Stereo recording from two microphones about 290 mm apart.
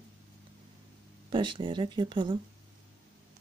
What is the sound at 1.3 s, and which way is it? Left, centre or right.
Speech, centre.